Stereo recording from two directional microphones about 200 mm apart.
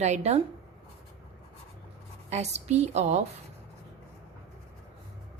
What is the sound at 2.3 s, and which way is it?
Speech, 35° right (ahead or behind).